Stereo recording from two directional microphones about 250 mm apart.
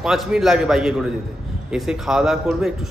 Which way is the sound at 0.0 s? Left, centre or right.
Centre.